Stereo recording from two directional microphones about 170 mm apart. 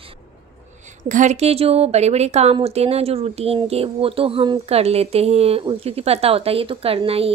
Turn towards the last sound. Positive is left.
turn(degrees=-35)  # may be behind; listen again after turning